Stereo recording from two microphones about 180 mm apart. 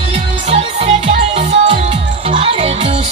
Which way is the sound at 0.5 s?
35° right (ahead or behind).